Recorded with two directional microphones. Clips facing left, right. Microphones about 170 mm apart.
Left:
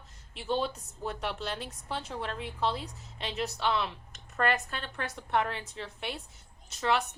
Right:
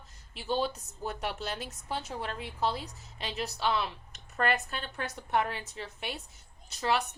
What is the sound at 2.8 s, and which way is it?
Speech, 40° right (ahead or behind).